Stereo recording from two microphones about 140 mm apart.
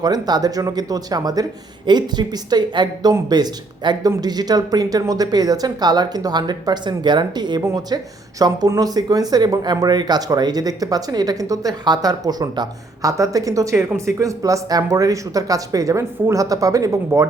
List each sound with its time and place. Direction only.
0.0 s a woman's voice: 30° right (ahead or behind)